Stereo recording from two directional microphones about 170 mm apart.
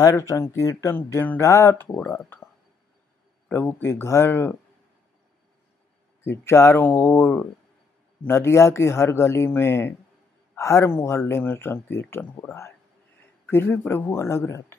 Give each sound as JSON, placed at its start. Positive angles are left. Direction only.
{"t": 0.0, "sound": "speech", "side_deg": 20}
{"t": 6.4, "sound": "speech", "side_deg": 15}